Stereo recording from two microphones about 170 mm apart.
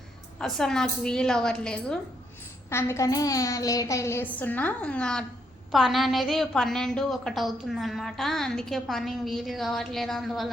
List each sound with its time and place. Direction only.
0.3 s a woman's voice: 5° left (ahead or behind)
2.6 s a child's voice: 15° left (ahead or behind); by 10.5 s centre (ahead or behind)